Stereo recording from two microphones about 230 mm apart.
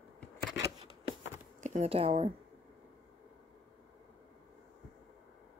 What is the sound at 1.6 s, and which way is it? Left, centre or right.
Speech, right.